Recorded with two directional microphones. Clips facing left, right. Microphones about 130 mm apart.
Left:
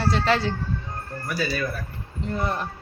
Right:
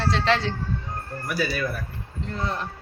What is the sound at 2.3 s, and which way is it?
Speech, 10° left (ahead or behind).